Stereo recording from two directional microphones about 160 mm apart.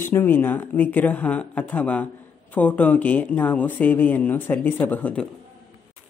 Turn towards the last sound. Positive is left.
turn(degrees=10)  # may be behind; listen again after turning